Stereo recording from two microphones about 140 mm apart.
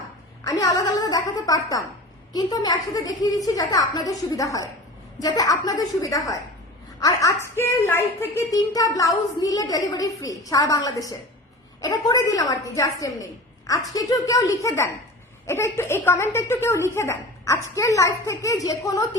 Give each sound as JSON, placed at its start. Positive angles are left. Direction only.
{"t": 0.4, "sound": "a woman's voice", "side_deg": 25}